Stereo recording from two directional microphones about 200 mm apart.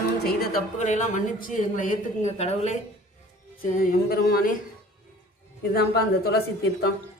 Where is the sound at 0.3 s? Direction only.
50° left (ahead or behind).